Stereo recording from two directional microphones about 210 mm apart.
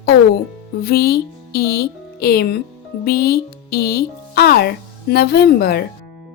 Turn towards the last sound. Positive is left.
turn(degrees=50)  # may be behind; listen again after turning